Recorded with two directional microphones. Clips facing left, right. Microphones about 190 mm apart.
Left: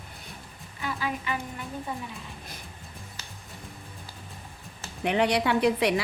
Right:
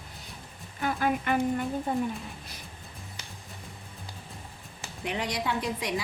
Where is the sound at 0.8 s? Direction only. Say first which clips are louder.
Right 4 dB; 55° right (ahead or behind).